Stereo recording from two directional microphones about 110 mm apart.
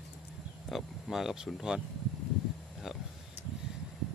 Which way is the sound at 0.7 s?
Centre (ahead or behind).